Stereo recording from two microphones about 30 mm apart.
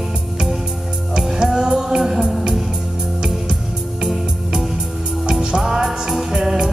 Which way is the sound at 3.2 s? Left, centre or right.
Right.